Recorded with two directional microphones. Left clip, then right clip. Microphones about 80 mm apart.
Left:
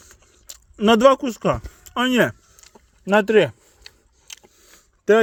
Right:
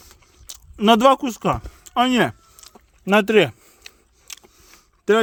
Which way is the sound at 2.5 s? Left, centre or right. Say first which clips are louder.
Right 3 dB; right.